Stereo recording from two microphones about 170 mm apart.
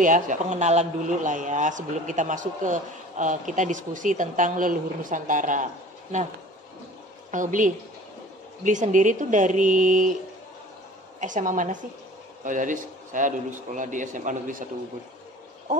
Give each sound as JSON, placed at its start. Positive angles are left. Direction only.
{"t": 0.0, "sound": "a man's voice", "side_deg": -50}
{"t": 7.2, "sound": "a woman's voice", "side_deg": -50}
{"t": 11.1, "sound": "a man's voice", "side_deg": -50}